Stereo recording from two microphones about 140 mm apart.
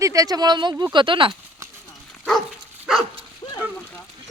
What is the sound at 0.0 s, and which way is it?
Speech, 25° right (ahead or behind).